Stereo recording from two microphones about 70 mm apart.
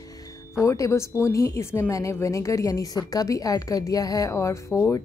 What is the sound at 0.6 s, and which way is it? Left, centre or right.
A woman's voice, left.